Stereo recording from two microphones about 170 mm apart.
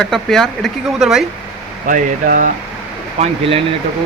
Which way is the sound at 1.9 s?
50° right (ahead or behind).